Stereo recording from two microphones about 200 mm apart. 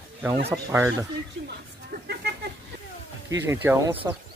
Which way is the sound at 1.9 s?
50° right (ahead or behind).